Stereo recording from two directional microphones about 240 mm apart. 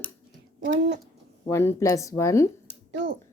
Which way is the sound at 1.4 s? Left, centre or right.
Centre.